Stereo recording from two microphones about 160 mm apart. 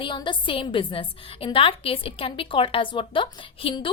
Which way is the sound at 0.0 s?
30° left (ahead or behind).